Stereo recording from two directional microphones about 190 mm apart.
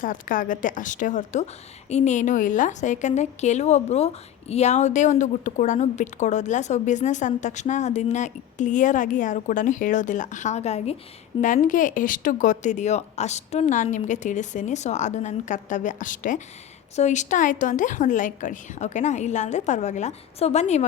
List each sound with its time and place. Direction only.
0.0 s a woman's voice: 45° left (ahead or behind)